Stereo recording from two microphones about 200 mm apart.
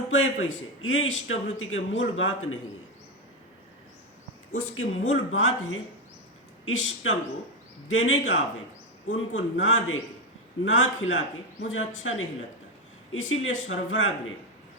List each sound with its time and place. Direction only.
0.1 s a man's voice: 75° left (ahead or behind)
4.5 s a man's voice: 90° left